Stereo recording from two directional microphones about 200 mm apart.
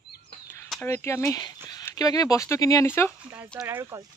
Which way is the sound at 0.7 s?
10° left (ahead or behind).